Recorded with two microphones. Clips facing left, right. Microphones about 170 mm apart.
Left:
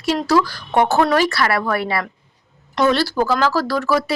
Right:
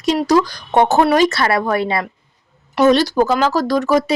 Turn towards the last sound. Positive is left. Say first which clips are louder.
# right 4 dB
turn(degrees=-20)  # may be behind; listen again after turning